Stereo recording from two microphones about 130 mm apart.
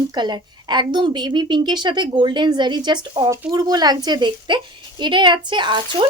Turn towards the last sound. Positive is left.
turn(degrees=-35)  # may be behind; listen again after turning